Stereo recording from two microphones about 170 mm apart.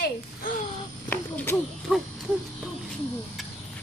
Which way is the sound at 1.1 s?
10° left (ahead or behind).